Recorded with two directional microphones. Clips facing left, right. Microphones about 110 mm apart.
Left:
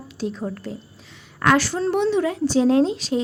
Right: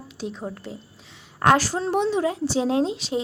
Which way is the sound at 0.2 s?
15° right (ahead or behind).